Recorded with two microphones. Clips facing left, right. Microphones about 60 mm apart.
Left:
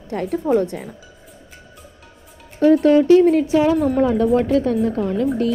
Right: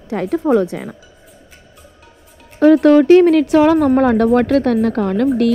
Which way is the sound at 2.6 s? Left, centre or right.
Right.